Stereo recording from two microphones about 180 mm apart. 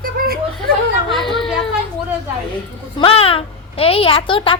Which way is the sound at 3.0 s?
30° left (ahead or behind).